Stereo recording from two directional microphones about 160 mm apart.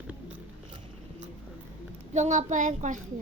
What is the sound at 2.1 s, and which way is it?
Speech, 50° right (ahead or behind).